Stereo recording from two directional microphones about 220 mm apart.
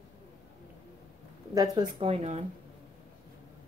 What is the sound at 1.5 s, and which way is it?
Speech, 15° right (ahead or behind).